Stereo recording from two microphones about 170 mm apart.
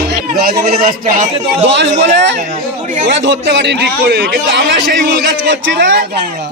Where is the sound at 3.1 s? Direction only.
90° right.